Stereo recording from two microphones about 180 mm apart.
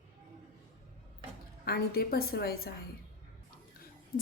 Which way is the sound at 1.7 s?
60° left (ahead or behind).